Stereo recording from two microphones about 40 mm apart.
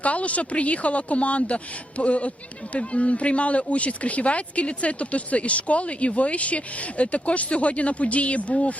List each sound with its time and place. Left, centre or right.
0.0 s speech: left